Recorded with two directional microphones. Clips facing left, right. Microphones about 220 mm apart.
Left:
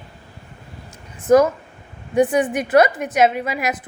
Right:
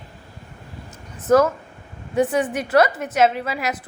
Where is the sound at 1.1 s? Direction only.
15° left (ahead or behind).